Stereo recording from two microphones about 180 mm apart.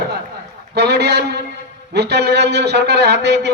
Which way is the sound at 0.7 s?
70° right (ahead or behind).